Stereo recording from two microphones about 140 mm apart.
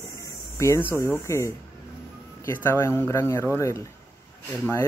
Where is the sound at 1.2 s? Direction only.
20° left (ahead or behind).